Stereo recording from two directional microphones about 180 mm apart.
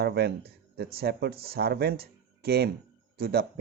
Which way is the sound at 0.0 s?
65° right (ahead or behind).